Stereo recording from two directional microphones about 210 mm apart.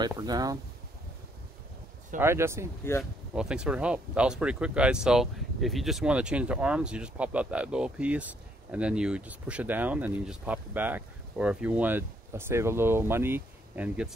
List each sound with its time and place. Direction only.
0.0 s speech: 20° right (ahead or behind)
2.1 s speech: 10° right (ahead or behind)